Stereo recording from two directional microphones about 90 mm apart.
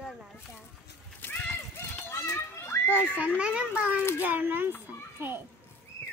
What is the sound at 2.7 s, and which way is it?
Music, 35° left (ahead or behind).